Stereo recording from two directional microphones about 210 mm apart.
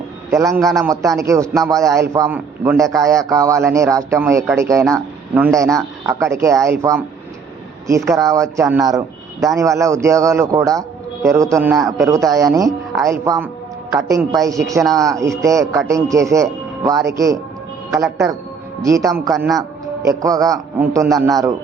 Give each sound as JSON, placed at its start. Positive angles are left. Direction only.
{"t": 0.3, "sound": "a man's voice", "side_deg": -15}
{"t": 0.6, "sound": "speech", "side_deg": 0}
{"t": 0.9, "sound": "a man's voice", "side_deg": -15}
{"t": 18.8, "sound": "a man's voice", "side_deg": -15}